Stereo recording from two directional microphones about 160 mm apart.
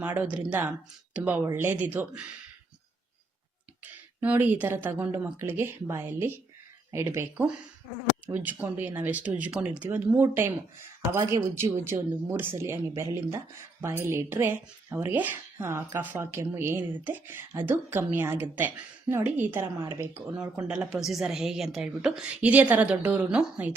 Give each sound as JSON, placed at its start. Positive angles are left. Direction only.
{"t": 0.0, "sound": "speech", "side_deg": -10}
{"t": 4.2, "sound": "speech", "side_deg": -10}